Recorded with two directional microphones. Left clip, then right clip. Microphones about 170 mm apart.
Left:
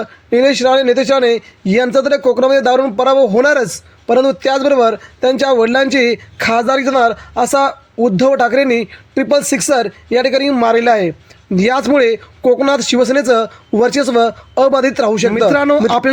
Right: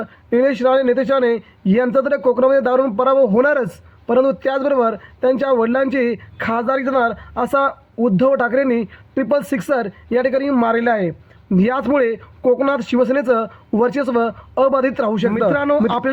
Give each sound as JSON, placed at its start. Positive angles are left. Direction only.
{"t": 0.0, "sound": "a man's voice", "side_deg": 40}